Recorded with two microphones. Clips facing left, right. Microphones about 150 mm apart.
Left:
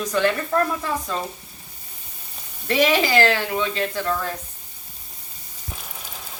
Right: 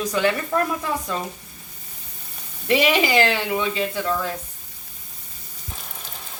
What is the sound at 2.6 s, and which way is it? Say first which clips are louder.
Speech: even; 15° right (ahead or behind).